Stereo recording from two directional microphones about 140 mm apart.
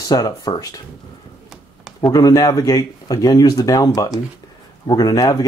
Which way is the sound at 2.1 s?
25° left (ahead or behind).